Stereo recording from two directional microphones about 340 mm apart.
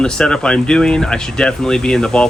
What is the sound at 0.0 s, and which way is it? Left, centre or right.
Speech, centre.